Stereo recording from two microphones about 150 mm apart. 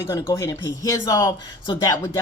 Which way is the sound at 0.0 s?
20° left (ahead or behind).